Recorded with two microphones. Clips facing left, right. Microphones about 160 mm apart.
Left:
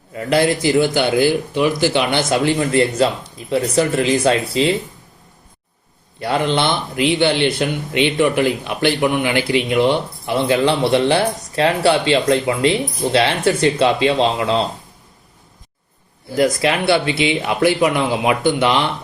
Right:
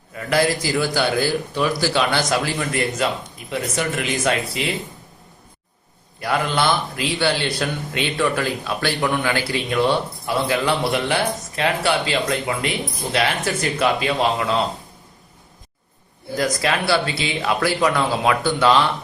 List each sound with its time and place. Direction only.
0.1 s speech: 30° left (ahead or behind)
6.1 s speech: 25° left (ahead or behind)
16.3 s speech: 25° left (ahead or behind)